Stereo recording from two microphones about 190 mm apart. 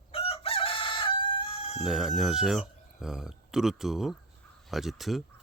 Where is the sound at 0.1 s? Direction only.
30° left (ahead or behind).